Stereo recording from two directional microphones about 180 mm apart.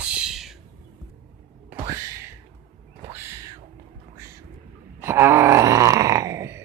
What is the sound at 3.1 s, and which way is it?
Music, 15° right (ahead or behind).